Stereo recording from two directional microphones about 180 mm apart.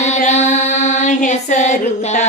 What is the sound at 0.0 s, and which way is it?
Female singing, 40° left (ahead or behind).